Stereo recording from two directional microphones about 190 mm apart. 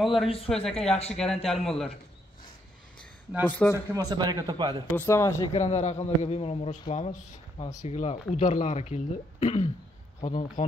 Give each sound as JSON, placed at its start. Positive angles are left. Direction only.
{"t": 0.0, "sound": "a man's voice", "side_deg": 0}
{"t": 3.4, "sound": "speech", "side_deg": 10}
{"t": 3.9, "sound": "speech", "side_deg": -20}
{"t": 4.9, "sound": "speech", "side_deg": 15}
{"t": 5.4, "sound": "speech", "side_deg": 35}